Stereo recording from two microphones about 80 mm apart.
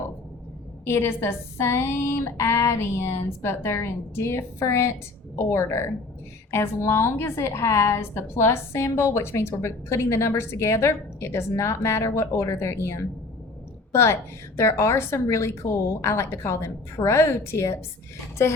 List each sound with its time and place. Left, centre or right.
0.9 s a woman's voice: left